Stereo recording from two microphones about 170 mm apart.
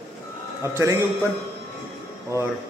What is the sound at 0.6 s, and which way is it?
Speech, 15° right (ahead or behind).